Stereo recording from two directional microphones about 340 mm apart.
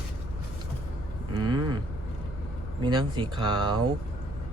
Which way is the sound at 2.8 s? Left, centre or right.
Centre.